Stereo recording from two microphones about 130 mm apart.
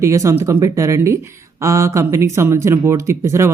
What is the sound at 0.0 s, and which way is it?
Speech, 25° right (ahead or behind).